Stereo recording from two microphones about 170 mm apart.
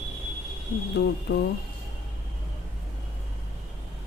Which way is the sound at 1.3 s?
75° left (ahead or behind).